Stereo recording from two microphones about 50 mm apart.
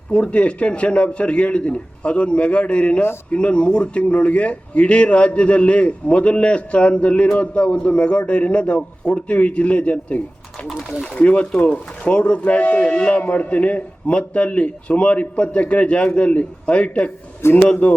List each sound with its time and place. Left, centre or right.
0.1 s a man's voice: left
10.7 s speech: centre
11.0 s a man's voice: left